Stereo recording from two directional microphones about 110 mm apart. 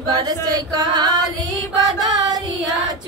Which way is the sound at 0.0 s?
35° right (ahead or behind).